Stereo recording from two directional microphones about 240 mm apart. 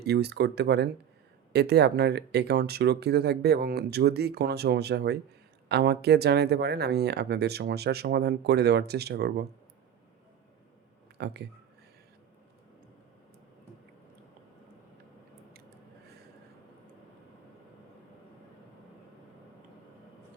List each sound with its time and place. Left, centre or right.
0.0 s speech: right
11.2 s speech: right